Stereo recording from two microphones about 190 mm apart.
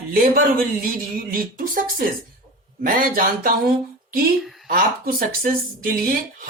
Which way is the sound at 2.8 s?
45° right (ahead or behind).